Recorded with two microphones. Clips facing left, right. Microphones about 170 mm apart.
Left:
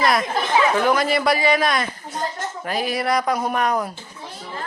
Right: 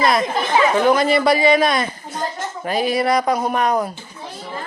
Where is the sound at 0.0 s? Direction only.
25° right (ahead or behind).